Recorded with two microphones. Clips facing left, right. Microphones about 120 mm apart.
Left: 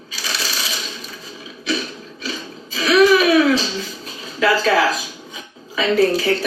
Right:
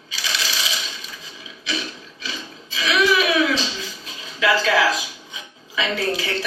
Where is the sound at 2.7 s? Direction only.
40° left (ahead or behind).